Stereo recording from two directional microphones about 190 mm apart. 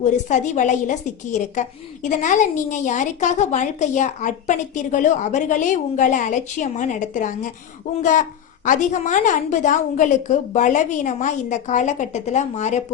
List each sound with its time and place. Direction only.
0.0 s a woman's voice: 40° left (ahead or behind)